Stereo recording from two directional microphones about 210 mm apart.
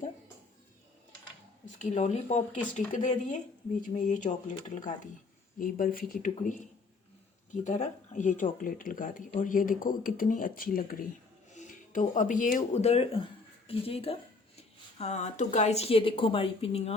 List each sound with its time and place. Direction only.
1.6 s a woman's voice: 35° left (ahead or behind)